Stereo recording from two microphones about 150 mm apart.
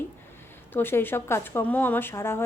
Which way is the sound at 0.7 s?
15° left (ahead or behind).